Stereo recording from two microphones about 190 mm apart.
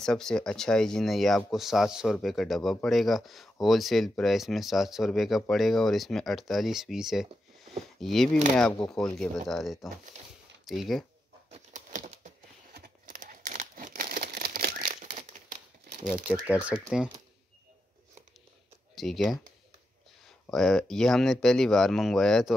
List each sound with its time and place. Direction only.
0.0 s speech: 5° left (ahead or behind)
11.5 s typewriter: 40° right (ahead or behind)
12.7 s crumpling: 50° right (ahead or behind)
16.4 s speech: 5° right (ahead or behind)
18.9 s speech: centre (ahead or behind)